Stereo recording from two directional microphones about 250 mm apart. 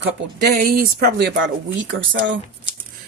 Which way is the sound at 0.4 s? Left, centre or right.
Right.